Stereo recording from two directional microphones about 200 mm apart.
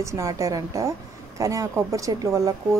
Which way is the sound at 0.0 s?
15° right (ahead or behind).